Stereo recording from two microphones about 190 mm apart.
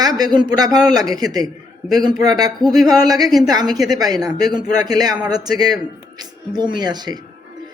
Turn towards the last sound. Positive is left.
turn(degrees=-20)  # may be behind; listen again after turning